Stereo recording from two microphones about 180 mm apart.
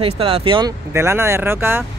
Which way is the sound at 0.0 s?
30° right (ahead or behind).